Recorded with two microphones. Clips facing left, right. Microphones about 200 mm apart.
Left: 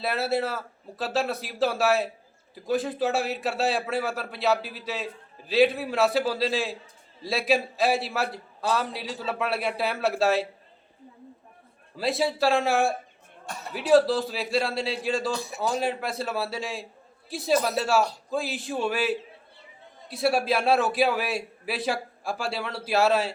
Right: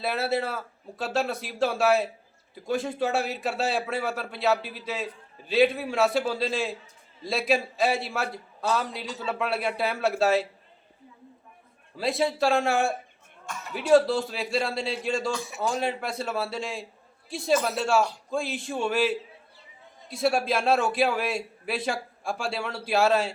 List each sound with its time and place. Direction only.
0.0 s speech: centre (ahead or behind)
11.9 s speech: centre (ahead or behind)
13.4 s speech: 35° left (ahead or behind)
13.7 s speech: centre (ahead or behind)
15.3 s a man's voice: 35° left (ahead or behind)
15.6 s speech: centre (ahead or behind)